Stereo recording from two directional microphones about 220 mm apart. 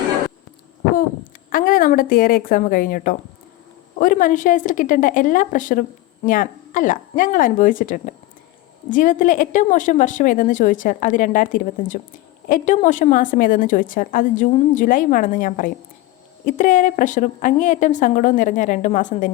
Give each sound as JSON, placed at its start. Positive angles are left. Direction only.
{"t": 0.9, "sound": "a woman's voice", "side_deg": 40}